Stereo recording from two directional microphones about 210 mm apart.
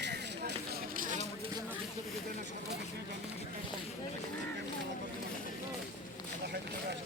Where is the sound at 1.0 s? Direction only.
35° right (ahead or behind).